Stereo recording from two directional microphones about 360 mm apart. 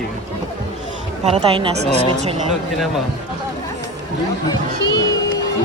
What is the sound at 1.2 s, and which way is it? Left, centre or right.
Speech, centre.